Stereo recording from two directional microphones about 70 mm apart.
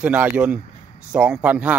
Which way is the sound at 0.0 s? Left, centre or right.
Right.